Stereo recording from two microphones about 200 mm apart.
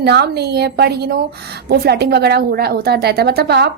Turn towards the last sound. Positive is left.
turn(degrees=-55)  # may be behind; listen again after turning